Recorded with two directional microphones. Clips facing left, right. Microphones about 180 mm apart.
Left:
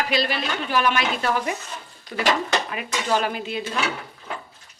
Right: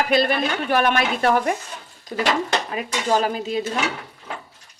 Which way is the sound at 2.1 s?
40° right (ahead or behind).